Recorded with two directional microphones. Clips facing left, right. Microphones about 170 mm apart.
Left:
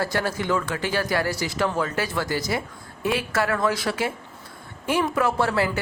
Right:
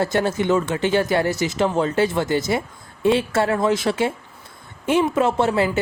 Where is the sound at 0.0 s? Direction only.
25° right (ahead or behind).